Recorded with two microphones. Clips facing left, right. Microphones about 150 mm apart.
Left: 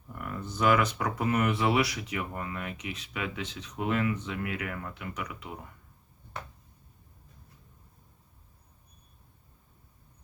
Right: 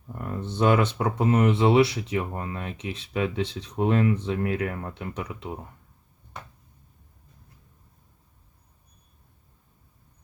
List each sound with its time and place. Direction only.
0.1 s speech: 30° right (ahead or behind)